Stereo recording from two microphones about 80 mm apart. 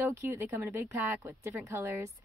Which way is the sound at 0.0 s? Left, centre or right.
Right.